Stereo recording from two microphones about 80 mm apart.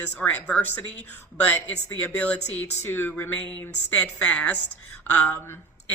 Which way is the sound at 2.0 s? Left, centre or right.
Centre.